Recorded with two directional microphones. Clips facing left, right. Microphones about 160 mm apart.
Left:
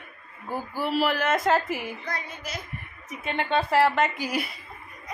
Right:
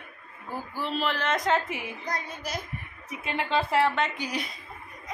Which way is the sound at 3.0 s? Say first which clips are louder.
Left 2 dB; centre (ahead or behind).